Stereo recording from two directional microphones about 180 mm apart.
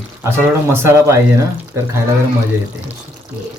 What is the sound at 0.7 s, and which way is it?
Speech, 15° right (ahead or behind).